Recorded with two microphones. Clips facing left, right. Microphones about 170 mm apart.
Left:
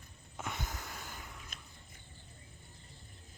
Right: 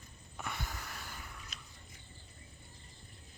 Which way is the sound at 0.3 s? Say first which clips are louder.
Left 1 dB; 20° left (ahead or behind).